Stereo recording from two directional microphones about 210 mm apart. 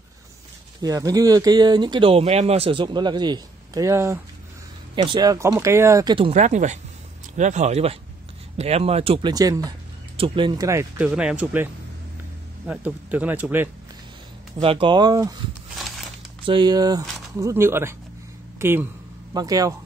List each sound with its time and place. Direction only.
0.7 s speech: 15° right (ahead or behind)
14.6 s speech: 25° right (ahead or behind)
16.4 s speech: 20° right (ahead or behind)